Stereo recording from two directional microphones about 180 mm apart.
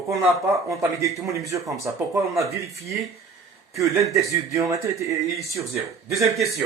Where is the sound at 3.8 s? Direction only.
15° right (ahead or behind).